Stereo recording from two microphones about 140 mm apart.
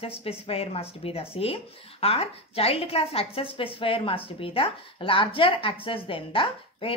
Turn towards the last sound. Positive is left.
turn(degrees=40)  # may be behind; listen again after turning